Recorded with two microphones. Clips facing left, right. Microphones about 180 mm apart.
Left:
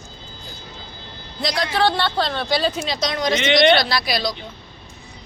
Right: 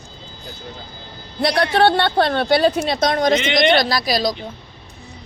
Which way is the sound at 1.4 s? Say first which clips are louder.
Right 5 dB; 60° right (ahead or behind).